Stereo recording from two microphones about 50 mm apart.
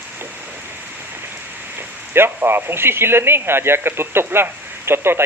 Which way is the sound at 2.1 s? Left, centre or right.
Right.